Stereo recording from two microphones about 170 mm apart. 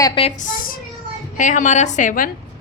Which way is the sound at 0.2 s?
40° left (ahead or behind).